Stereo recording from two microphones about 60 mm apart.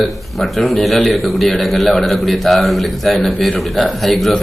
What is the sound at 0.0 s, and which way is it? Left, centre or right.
A man's voice, centre.